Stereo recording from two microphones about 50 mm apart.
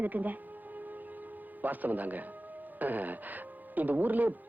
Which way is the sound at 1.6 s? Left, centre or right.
Right.